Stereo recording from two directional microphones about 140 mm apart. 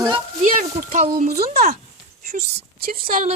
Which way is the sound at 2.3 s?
55° right (ahead or behind).